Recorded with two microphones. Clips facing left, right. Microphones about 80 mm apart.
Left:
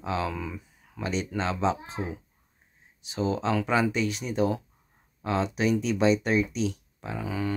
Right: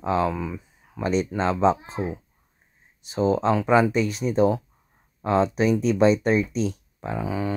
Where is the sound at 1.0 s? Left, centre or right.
Right.